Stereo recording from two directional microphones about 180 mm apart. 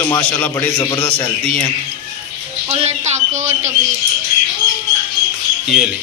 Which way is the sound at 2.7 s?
40° right (ahead or behind).